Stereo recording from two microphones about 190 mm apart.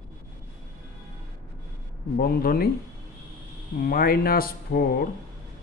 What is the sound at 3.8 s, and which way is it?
Speech, 50° left (ahead or behind).